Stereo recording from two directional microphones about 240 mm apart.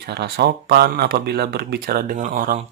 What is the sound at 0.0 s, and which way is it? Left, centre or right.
Speech, right.